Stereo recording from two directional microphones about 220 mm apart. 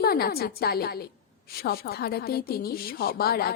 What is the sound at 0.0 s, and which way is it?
A woman's voice, 45° left (ahead or behind).